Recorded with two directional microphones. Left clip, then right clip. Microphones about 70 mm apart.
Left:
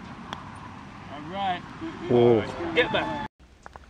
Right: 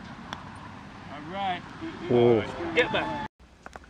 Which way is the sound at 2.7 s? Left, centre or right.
Left.